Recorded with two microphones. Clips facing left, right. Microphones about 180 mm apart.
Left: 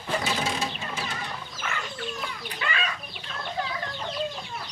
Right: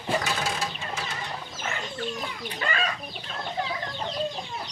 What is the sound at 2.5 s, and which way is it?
Chicken, 40° right (ahead or behind).